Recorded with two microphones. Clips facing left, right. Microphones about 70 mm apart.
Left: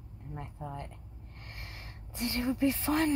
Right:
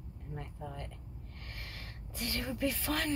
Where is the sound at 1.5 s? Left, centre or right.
Left.